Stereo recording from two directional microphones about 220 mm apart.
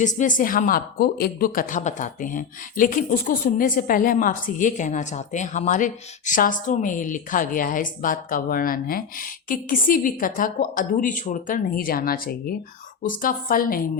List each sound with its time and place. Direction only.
0.0 s a woman's voice: 35° left (ahead or behind)